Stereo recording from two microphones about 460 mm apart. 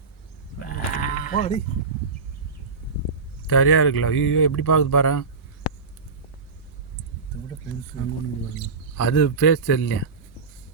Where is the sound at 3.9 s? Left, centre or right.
Left.